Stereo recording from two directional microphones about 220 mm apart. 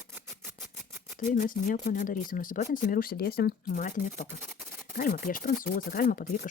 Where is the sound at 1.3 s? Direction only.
40° left (ahead or behind).